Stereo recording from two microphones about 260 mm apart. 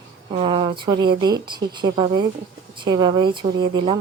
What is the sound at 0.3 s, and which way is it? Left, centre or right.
Speech, centre.